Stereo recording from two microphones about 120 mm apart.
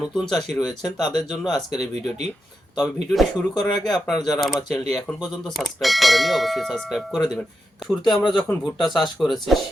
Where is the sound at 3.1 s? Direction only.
Centre (ahead or behind).